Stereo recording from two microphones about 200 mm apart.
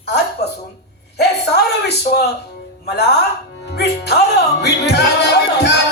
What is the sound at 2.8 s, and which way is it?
Music, 55° left (ahead or behind).